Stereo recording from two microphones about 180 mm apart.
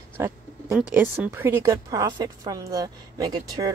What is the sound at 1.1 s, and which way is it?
A woman's voice, 10° right (ahead or behind).